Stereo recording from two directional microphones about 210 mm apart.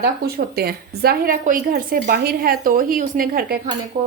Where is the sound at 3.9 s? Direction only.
40° right (ahead or behind).